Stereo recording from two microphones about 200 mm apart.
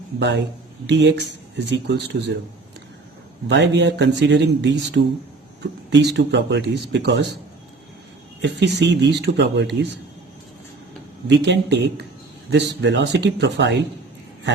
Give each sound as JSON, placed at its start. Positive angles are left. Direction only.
{"t": 0.2, "sound": "speech", "side_deg": -60}
{"t": 3.5, "sound": "speech", "side_deg": -60}
{"t": 8.4, "sound": "speech", "side_deg": -60}
{"t": 11.3, "sound": "speech", "side_deg": -60}